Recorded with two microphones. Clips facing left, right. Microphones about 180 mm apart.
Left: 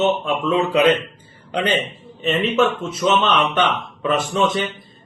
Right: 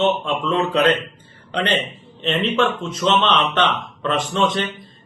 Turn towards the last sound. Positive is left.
turn(degrees=5)  # may be behind; listen again after turning